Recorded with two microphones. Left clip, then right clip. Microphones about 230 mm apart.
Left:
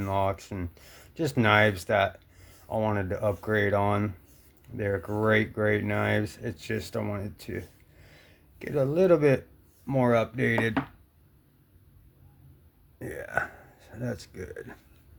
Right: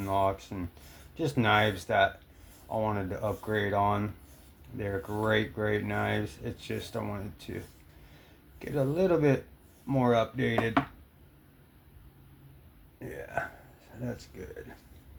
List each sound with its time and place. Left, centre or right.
0.0 s speech: left
13.0 s speech: left